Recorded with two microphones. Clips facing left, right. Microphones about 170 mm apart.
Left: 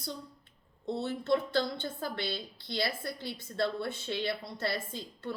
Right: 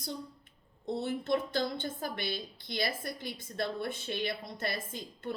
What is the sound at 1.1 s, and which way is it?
A woman's voice, 20° right (ahead or behind).